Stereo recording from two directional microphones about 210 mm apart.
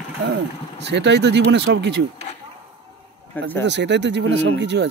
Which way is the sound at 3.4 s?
10° left (ahead or behind).